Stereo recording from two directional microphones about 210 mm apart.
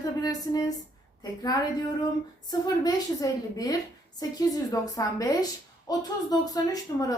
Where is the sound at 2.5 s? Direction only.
20° left (ahead or behind).